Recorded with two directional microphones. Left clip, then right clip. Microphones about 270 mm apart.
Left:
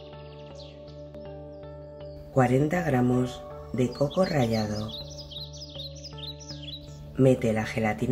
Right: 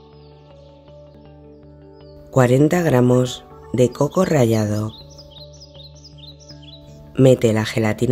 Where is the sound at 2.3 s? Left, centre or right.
Right.